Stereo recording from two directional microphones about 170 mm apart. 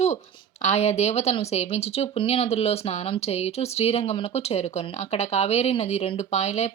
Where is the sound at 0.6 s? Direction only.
40° left (ahead or behind).